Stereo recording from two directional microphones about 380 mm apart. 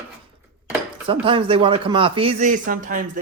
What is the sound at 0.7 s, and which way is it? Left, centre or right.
Speech, centre.